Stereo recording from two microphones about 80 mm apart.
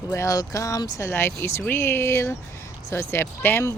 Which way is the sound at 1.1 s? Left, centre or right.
Left.